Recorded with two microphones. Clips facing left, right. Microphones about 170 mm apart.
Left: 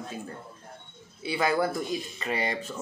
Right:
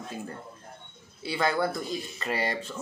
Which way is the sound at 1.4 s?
5° left (ahead or behind).